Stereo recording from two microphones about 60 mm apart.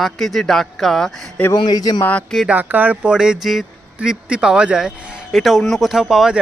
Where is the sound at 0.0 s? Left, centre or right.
Centre.